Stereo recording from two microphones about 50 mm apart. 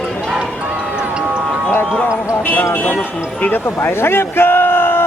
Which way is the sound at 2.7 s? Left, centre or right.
Left.